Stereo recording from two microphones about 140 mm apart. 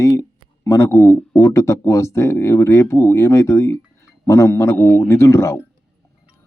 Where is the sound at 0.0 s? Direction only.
20° left (ahead or behind).